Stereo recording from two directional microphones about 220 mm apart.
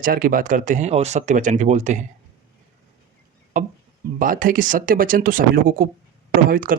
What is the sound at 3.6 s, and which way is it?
Speech, 35° right (ahead or behind).